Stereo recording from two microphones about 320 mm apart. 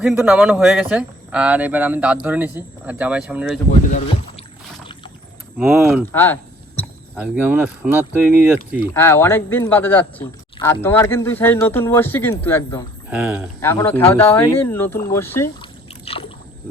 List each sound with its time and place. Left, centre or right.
0.0 s speech: centre
3.8 s speech: centre
5.5 s speech: centre
6.1 s a sound: centre
7.2 s speech: centre
8.9 s speech: centre
13.6 s speech: centre